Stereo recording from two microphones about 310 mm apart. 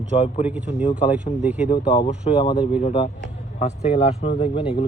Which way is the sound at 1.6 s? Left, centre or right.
Centre.